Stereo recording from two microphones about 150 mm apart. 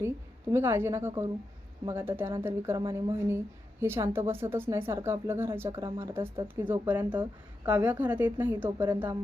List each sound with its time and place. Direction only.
0.5 s a woman's voice: 15° right (ahead or behind)